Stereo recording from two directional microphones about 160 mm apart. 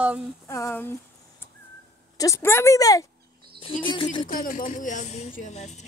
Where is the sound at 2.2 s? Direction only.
20° left (ahead or behind).